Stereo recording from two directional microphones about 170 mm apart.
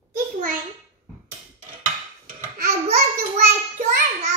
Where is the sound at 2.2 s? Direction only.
55° right (ahead or behind).